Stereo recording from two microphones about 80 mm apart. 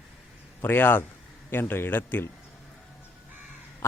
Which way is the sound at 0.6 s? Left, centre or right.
Left.